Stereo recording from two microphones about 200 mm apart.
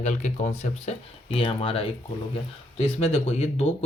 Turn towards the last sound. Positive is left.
turn(degrees=30)  # may be behind; listen again after turning